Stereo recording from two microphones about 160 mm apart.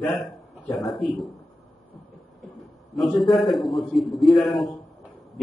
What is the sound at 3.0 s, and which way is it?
A man's voice, centre (ahead or behind).